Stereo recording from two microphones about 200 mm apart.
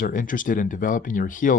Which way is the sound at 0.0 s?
40° left (ahead or behind).